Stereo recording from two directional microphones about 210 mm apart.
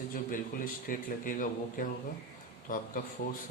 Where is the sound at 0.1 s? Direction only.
40° left (ahead or behind).